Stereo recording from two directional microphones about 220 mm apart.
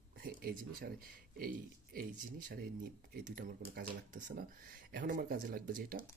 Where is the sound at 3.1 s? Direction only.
40° right (ahead or behind).